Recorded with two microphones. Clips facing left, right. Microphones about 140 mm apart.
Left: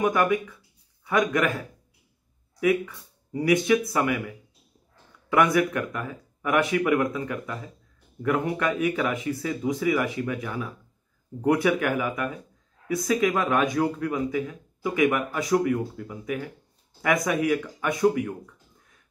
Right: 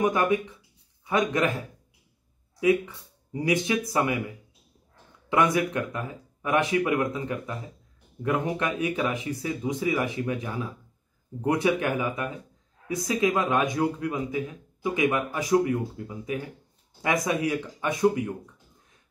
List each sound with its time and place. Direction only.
0.1 s speech: 25° right (ahead or behind)
2.6 s speech: 25° right (ahead or behind)
5.3 s speech: 20° right (ahead or behind)